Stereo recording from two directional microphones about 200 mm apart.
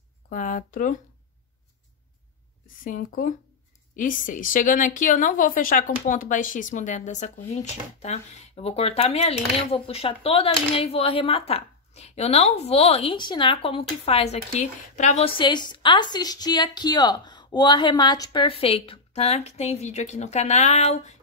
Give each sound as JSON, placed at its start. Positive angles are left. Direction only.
{"t": 0.3, "sound": "a woman's voice", "side_deg": 40}
{"t": 2.8, "sound": "a woman's voice", "side_deg": 45}